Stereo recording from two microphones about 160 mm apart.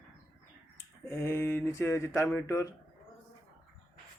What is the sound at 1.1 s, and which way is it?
Speech, 15° left (ahead or behind).